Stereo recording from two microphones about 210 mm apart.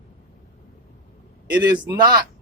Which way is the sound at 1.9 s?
20° right (ahead or behind).